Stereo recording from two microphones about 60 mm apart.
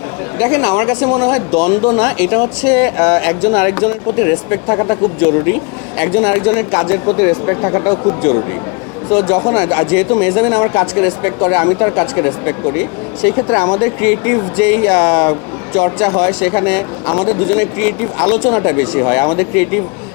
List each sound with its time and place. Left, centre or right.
0.3 s speech: left
9.0 s speech: left